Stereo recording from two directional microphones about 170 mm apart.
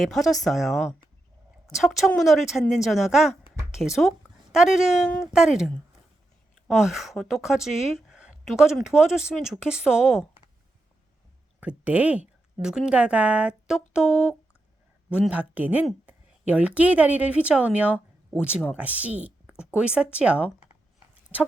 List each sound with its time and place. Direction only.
0.0 s a woman's voice: centre (ahead or behind)
5.0 s speech: 10° left (ahead or behind)
5.3 s a woman's voice: 5° right (ahead or behind)
11.6 s a woman's voice: 10° right (ahead or behind)